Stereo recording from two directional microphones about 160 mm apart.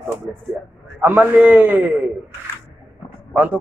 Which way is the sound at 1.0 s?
10° right (ahead or behind).